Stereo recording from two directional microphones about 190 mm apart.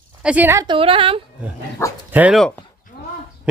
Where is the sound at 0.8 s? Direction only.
30° right (ahead or behind).